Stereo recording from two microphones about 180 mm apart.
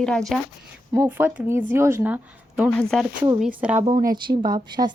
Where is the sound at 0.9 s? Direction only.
15° right (ahead or behind).